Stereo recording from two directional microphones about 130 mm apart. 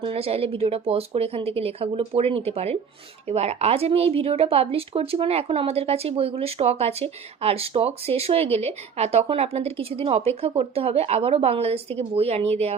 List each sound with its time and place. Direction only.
0.0 s speech: 50° right (ahead or behind)